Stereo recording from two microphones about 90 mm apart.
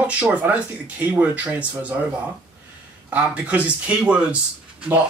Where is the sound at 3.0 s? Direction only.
15° right (ahead or behind).